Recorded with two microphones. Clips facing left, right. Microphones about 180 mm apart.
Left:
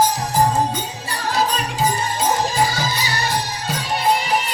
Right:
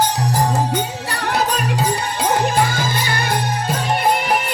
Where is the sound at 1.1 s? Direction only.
65° right (ahead or behind).